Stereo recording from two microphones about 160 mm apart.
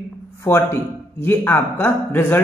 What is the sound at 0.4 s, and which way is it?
A man's voice, 15° left (ahead or behind).